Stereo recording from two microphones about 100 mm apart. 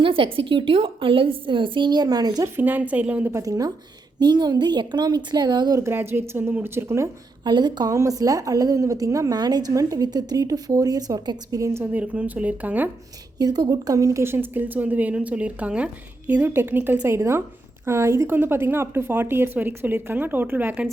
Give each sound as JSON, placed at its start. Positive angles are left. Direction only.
{"t": 0.0, "sound": "a woman's voice", "side_deg": -60}
{"t": 2.6, "sound": "speech", "side_deg": -15}
{"t": 3.3, "sound": "a woman's voice", "side_deg": -35}
{"t": 4.2, "sound": "a woman's voice", "side_deg": -45}
{"t": 5.8, "sound": "a woman's voice", "side_deg": -25}
{"t": 7.4, "sound": "a woman's voice", "side_deg": -45}
{"t": 7.9, "sound": "a woman's voice", "side_deg": -35}
{"t": 11.8, "sound": "speech", "side_deg": -15}
{"t": 13.4, "sound": "a woman's voice", "side_deg": -40}
{"t": 17.0, "sound": "a woman's voice", "side_deg": -30}